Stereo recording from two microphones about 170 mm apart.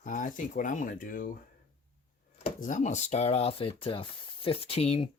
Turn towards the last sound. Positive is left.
turn(degrees=35)  # may be behind; listen again after turning